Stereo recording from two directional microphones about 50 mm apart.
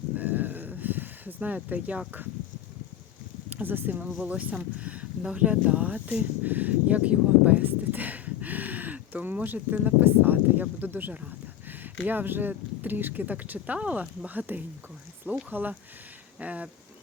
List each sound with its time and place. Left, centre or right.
0.2 s a sound: right
3.5 s speech: right
4.2 s speech: right
14.3 s speech: right